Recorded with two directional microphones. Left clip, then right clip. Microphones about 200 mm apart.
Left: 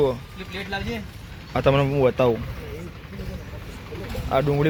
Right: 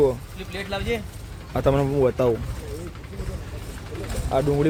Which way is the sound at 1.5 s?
Centre (ahead or behind).